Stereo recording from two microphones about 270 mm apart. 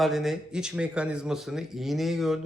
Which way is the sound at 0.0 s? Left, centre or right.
Centre.